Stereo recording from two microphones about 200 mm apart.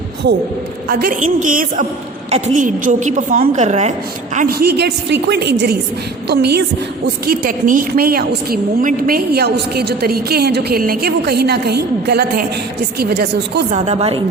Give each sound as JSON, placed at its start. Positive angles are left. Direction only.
{"t": 0.9, "sound": "a woman's voice", "side_deg": -45}
{"t": 4.4, "sound": "a woman's voice", "side_deg": -50}
{"t": 6.2, "sound": "music", "side_deg": -55}
{"t": 7.3, "sound": "a woman's voice", "side_deg": -45}
{"t": 13.7, "sound": "a woman's voice", "side_deg": -35}